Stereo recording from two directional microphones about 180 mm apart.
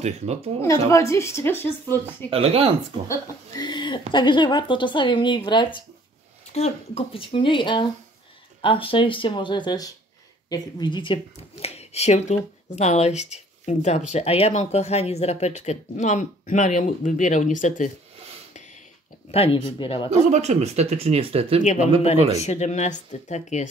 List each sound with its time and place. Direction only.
0.0 s speech: 40° right (ahead or behind)
0.6 s a woman's voice: 15° left (ahead or behind)
2.3 s speech: 35° right (ahead or behind)
3.1 s speech: 20° left (ahead or behind)
6.5 s speech: 35° left (ahead or behind)
19.3 s speech: 30° left (ahead or behind)
20.1 s speech: 40° right (ahead or behind)
22.4 s speech: 40° left (ahead or behind)